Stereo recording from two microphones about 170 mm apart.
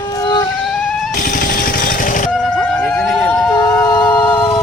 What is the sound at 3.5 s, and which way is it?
Emergency vehicle, 20° left (ahead or behind).